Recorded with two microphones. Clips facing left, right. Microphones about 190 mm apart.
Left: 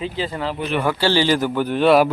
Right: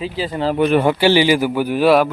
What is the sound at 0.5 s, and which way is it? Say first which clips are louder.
Speech: right 9 dB; 60° right (ahead or behind).